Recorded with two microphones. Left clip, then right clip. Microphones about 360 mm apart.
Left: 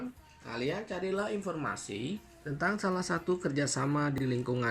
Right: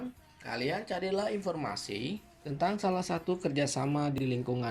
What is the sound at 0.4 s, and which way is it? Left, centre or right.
Music, centre.